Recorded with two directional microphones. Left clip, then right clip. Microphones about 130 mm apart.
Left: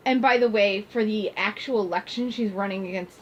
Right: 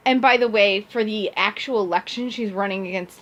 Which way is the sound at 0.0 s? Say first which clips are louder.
Right 4 dB; 40° right (ahead or behind).